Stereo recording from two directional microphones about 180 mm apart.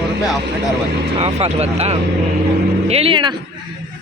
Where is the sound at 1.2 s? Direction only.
35° right (ahead or behind).